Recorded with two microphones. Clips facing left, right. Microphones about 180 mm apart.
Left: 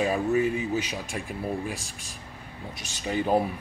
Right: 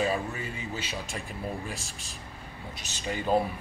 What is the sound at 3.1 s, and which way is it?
Speech, 15° left (ahead or behind).